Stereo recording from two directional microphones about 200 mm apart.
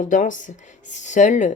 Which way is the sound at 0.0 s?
40° left (ahead or behind).